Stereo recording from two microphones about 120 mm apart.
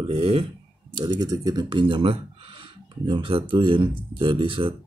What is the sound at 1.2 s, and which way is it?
Speech, 35° right (ahead or behind).